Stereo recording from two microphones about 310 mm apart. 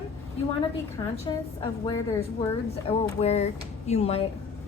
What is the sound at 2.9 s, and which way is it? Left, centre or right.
Speech, centre.